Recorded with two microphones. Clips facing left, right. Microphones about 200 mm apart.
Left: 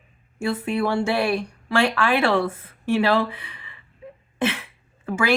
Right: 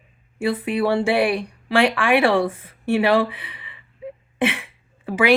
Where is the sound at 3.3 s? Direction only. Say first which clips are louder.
Even; 15° right (ahead or behind).